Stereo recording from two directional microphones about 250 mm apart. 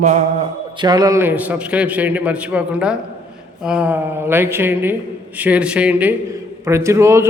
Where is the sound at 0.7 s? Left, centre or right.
Centre.